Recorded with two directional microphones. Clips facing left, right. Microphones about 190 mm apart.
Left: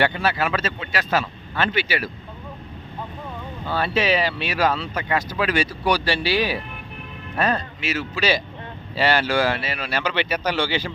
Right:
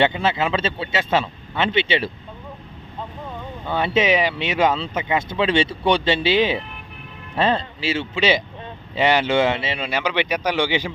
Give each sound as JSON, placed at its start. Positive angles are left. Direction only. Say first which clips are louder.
{"t": 0.0, "sound": "speech", "louder": "right 2 dB", "side_deg": -25}
{"t": 3.7, "sound": "speech", "louder": "right 2 dB", "side_deg": -20}